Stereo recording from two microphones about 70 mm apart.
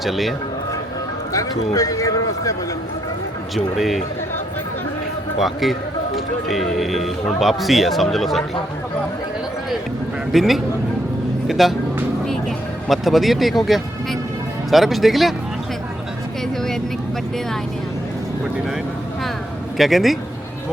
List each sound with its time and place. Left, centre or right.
0.0 s speech: centre
1.3 s speech: left
3.5 s speech: centre
5.4 s speech: centre
10.3 s speech: centre
11.4 s music: centre
12.2 s a sound: centre
13.7 s speech: centre
19.7 s speech: centre